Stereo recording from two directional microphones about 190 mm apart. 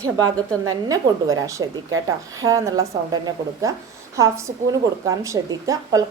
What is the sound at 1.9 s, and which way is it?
Speech, 90° right.